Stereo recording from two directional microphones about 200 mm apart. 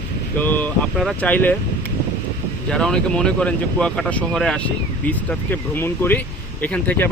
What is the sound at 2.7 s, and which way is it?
Speech, 5° left (ahead or behind).